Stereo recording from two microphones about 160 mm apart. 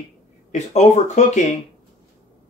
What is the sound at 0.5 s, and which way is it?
Speech, 50° left (ahead or behind).